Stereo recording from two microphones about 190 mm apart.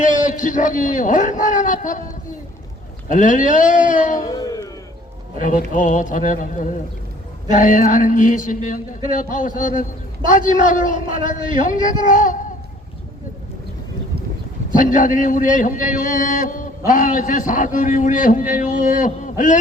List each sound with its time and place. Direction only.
0.0 s a man's voice: 45° left (ahead or behind)
3.1 s a man's voice: 45° left (ahead or behind)
4.2 s speech: 20° left (ahead or behind)
5.4 s a man's voice: 45° left (ahead or behind)
14.7 s a man's voice: 45° left (ahead or behind)